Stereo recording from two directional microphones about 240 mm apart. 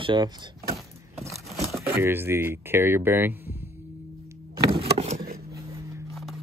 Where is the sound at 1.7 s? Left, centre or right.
Centre.